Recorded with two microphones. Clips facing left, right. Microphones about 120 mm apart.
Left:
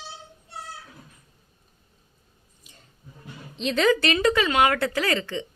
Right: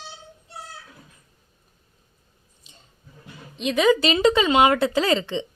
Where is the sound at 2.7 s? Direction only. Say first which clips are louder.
Even; 30° right (ahead or behind).